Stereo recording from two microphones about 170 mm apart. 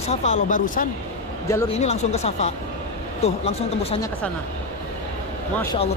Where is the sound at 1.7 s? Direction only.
40° left (ahead or behind).